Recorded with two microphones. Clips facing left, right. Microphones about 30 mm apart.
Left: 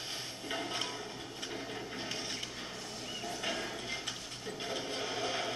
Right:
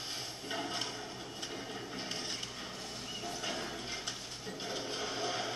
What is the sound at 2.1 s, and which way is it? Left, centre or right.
Music, centre.